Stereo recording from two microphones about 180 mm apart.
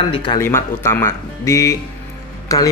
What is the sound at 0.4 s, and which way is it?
Speech, 15° left (ahead or behind).